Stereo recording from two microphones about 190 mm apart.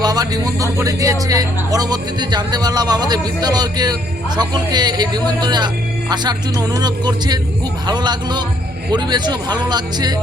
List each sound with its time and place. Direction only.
0.0 s speech: 20° right (ahead or behind)